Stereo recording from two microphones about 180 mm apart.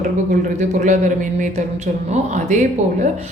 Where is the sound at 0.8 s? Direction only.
40° right (ahead or behind).